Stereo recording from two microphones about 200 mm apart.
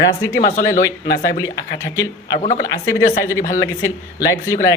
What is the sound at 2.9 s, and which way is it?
Speech, 15° left (ahead or behind).